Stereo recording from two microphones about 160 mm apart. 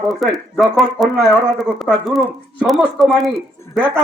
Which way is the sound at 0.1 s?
Centre (ahead or behind).